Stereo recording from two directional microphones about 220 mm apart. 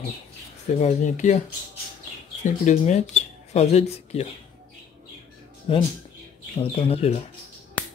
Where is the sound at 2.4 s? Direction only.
30° left (ahead or behind).